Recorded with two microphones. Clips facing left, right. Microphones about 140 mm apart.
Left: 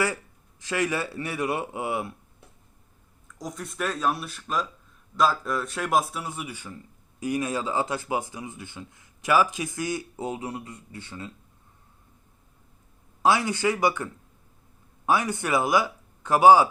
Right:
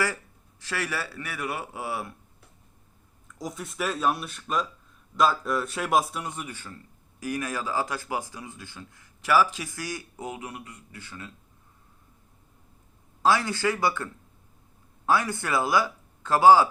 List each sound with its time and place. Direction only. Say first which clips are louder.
0.6 s a man's voice: left 5 dB; 20° left (ahead or behind)
3.2 s a man's voice: even; centre (ahead or behind); by 11.3 s 25° left (ahead or behind)
13.2 s speech: left 1 dB; 15° left (ahead or behind)